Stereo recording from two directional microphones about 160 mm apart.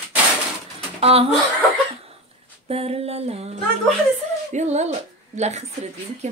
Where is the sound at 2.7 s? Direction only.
40° right (ahead or behind).